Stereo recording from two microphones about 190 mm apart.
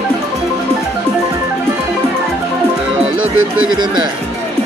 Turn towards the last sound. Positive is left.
turn(degrees=-90)